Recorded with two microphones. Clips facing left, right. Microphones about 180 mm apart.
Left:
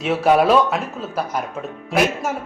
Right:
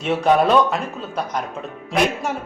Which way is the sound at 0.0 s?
5° left (ahead or behind).